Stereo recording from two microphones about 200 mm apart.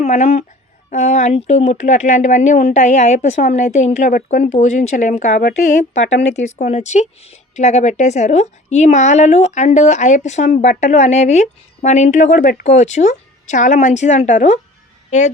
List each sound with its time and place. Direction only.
0.0 s a woman's voice: 35° left (ahead or behind)
6.0 s speech: 60° left (ahead or behind)
6.3 s speech: 35° left (ahead or behind)